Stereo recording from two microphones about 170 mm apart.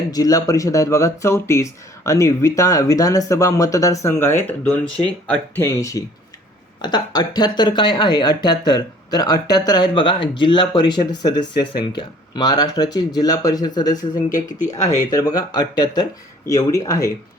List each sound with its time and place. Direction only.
0.1 s speech: 20° left (ahead or behind)
14.3 s speech: 50° left (ahead or behind)
14.8 s speech: 40° left (ahead or behind)
15.1 s speech: 20° left (ahead or behind)